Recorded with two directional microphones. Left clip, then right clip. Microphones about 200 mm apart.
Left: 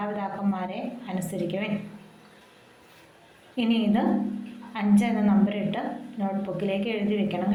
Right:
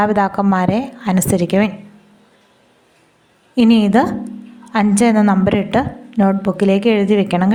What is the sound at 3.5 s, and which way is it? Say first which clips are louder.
A woman's voice: right 13 dB; 50° right (ahead or behind).